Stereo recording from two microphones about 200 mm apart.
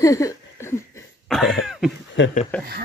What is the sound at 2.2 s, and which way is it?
Speech, 65° left (ahead or behind).